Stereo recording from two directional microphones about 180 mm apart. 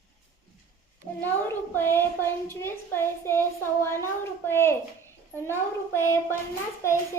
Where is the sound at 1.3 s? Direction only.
10° left (ahead or behind).